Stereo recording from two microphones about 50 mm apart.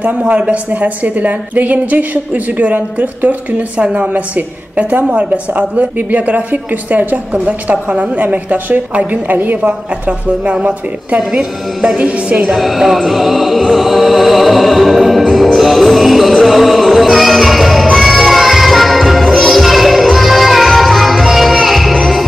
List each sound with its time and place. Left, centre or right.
0.0 s a woman's voice: right
12.4 s music: centre